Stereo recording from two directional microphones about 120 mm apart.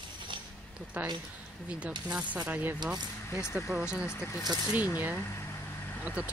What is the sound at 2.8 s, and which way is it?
Speech, 35° right (ahead or behind).